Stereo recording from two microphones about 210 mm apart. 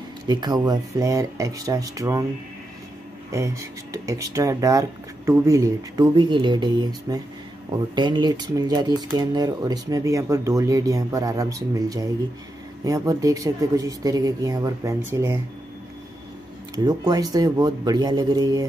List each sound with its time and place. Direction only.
0.3 s speech: 20° right (ahead or behind)
3.3 s speech: 15° right (ahead or behind)
16.7 s speech: 20° right (ahead or behind)